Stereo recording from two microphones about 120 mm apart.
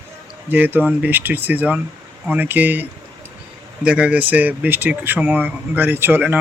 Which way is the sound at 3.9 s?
10° right (ahead or behind).